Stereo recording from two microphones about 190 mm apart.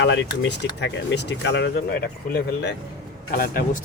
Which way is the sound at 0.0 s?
65° left (ahead or behind).